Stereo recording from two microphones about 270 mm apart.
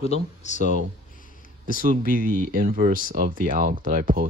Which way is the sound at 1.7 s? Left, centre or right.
Right.